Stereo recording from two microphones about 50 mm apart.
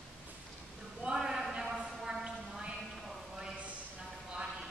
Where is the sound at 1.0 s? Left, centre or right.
Centre.